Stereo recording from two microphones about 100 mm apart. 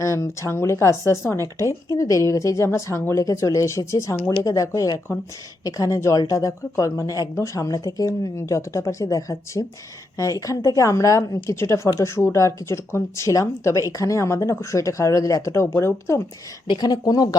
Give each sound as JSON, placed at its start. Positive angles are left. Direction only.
{"t": 0.0, "sound": "a woman's voice", "side_deg": 30}
{"t": 16.6, "sound": "a woman's voice", "side_deg": 45}